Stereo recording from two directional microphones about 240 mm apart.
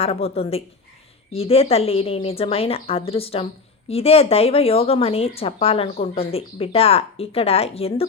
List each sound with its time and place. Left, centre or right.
0.0 s a woman's voice: left